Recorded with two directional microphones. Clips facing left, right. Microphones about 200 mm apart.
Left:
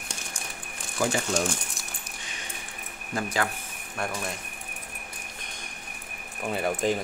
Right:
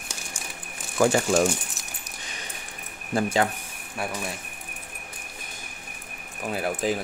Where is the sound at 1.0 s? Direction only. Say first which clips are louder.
Right 6 dB; 55° right (ahead or behind).